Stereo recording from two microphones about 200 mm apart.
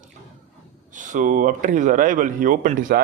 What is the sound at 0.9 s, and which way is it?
Speech, 40° right (ahead or behind).